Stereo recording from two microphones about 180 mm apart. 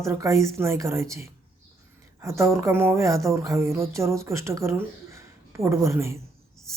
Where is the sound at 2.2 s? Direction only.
15° right (ahead or behind).